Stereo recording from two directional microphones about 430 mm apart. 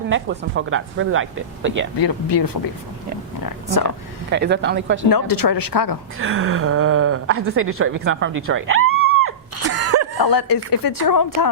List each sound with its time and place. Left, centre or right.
0.1 s speech: right
2.0 s speech: left
3.4 s a sound: left
4.3 s speech: right
5.0 s speech: left
6.1 s speech: right
9.0 s a sound: right
10.2 s speech: left